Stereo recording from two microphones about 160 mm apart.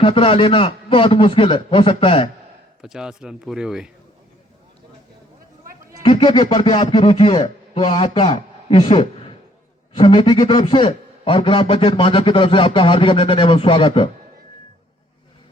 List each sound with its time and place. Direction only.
0.0 s a man's voice: 35° left (ahead or behind)
2.8 s speech: 5° right (ahead or behind)
6.0 s a man's voice: 35° left (ahead or behind)